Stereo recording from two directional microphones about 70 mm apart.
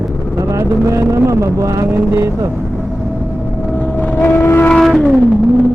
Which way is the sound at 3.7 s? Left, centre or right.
Centre.